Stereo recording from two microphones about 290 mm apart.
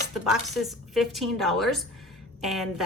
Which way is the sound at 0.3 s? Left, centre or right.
Centre.